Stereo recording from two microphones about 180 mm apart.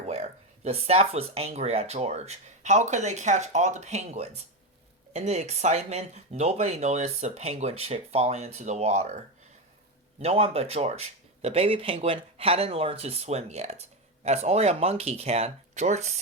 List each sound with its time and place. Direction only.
0.0 s speech: 35° right (ahead or behind)